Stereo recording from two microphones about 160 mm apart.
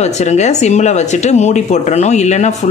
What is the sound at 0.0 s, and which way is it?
Speech, 45° left (ahead or behind).